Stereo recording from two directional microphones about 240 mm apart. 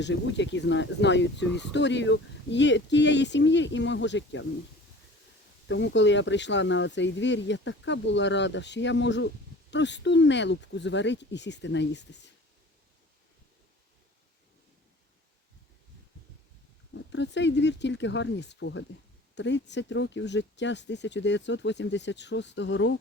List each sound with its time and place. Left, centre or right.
0.0 s speech: left
5.6 s speech: left
16.9 s speech: left